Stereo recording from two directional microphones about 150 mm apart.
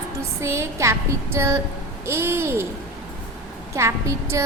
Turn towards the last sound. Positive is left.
turn(degrees=-20)  # may be behind; listen again after turning